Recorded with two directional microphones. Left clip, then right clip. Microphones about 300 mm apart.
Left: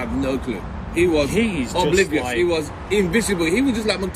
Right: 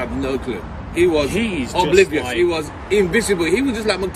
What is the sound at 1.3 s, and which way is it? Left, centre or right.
Speech, centre.